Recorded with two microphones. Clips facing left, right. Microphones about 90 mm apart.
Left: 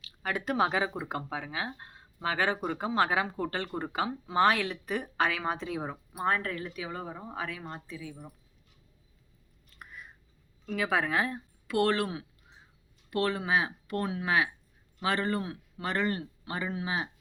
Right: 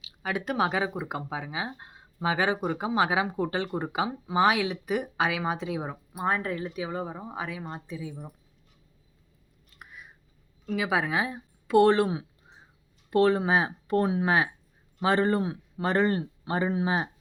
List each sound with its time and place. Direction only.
0.0 s speech: 5° right (ahead or behind)
9.6 s chewing: 5° right (ahead or behind)
10.7 s speech: 10° right (ahead or behind)
11.7 s speech: 25° right (ahead or behind)